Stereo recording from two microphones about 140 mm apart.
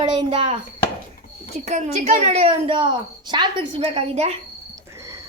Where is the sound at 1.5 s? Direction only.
55° right (ahead or behind).